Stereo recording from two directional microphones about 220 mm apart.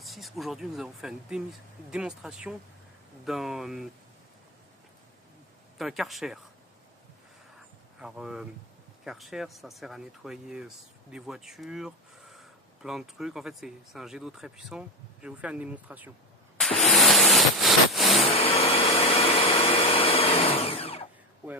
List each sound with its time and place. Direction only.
0.0 s speech: centre (ahead or behind)
5.7 s speech: centre (ahead or behind)
7.9 s speech: 5° right (ahead or behind)
16.6 s a sound: centre (ahead or behind)
18.2 s vacuum cleaner: 25° left (ahead or behind)